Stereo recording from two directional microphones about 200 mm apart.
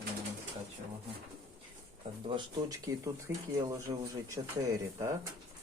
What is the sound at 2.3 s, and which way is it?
Speech, 15° right (ahead or behind).